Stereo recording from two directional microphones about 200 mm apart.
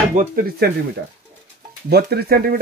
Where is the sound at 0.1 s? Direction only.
40° right (ahead or behind).